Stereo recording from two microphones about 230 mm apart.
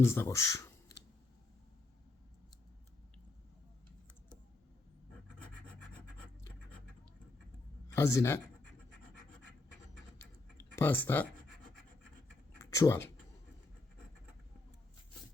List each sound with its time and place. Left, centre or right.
0.0 s speech: centre
7.9 s speech: centre
10.6 s writing: centre
12.7 s speech: centre